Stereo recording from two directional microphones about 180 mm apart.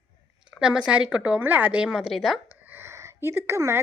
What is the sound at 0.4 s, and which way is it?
A woman's voice, 5° right (ahead or behind).